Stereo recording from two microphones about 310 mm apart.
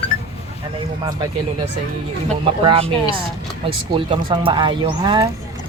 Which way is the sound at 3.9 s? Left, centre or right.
Centre.